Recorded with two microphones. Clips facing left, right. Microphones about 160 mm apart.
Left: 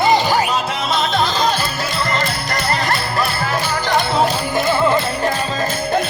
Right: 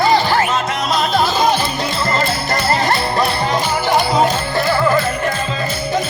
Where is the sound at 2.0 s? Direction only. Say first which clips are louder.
Right 3 dB; 30° right (ahead or behind); by 4.0 s 15° right (ahead or behind).